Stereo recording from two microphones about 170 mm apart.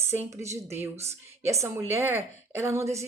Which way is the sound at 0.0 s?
15° right (ahead or behind).